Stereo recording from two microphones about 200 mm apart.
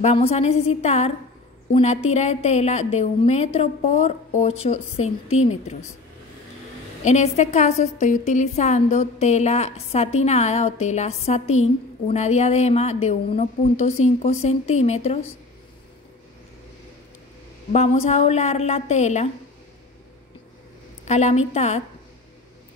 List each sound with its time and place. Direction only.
0.0 s a woman's voice: 30° left (ahead or behind)
7.1 s a woman's voice: 35° left (ahead or behind)
17.7 s a woman's voice: 30° left (ahead or behind)
21.0 s a woman's voice: 35° left (ahead or behind)